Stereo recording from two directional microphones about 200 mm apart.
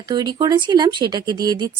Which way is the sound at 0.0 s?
20° right (ahead or behind).